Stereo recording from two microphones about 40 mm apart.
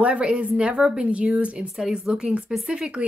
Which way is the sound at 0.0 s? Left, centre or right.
Right.